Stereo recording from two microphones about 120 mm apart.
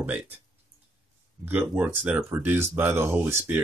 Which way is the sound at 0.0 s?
15° right (ahead or behind).